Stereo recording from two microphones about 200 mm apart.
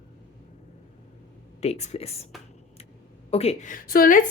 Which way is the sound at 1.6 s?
35° left (ahead or behind).